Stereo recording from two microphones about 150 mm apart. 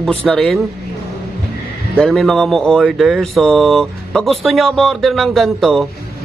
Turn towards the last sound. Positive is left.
turn(degrees=0)  # may be behind; listen again after turning